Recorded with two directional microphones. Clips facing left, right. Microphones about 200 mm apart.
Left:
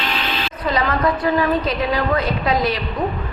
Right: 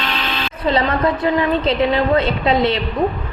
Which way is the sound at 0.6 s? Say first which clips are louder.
Right 2 dB; 25° right (ahead or behind).